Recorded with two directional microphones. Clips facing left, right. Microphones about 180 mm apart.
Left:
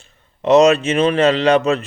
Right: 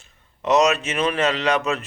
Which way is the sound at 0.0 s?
30° left (ahead or behind).